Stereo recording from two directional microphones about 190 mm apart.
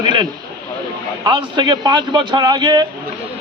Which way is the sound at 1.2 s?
20° right (ahead or behind).